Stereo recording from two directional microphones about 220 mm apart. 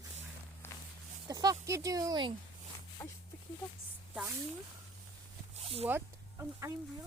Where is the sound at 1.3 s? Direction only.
15° right (ahead or behind).